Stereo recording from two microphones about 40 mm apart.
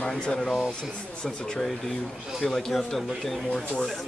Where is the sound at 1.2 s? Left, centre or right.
Left.